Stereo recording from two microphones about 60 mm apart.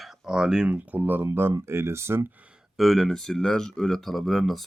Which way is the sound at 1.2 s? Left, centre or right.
Right.